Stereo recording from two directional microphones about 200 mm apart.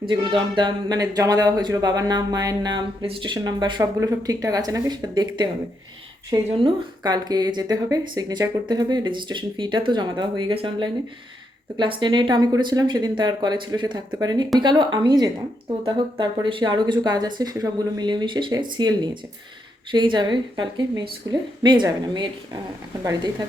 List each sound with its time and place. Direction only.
0.1 s speech: 20° right (ahead or behind)